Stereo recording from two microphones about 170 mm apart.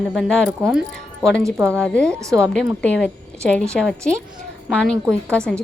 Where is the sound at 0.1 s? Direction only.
Centre (ahead or behind).